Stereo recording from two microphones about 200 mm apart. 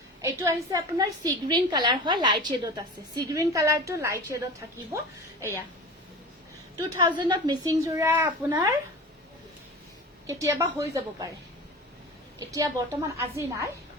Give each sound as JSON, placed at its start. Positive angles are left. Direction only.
{"t": 0.2, "sound": "a woman's voice", "side_deg": -15}
{"t": 6.7, "sound": "a woman's voice", "side_deg": -20}
{"t": 8.4, "sound": "a woman's voice", "side_deg": -20}
{"t": 10.2, "sound": "a woman's voice", "side_deg": -15}
{"t": 12.5, "sound": "a woman's voice", "side_deg": -15}